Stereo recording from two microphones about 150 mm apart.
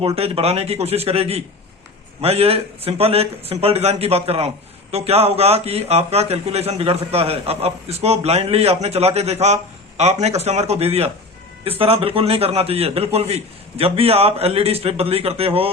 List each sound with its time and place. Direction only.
0.2 s a man's voice: 40° right (ahead or behind)